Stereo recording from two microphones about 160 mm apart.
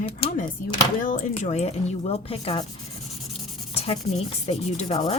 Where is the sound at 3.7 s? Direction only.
40° left (ahead or behind).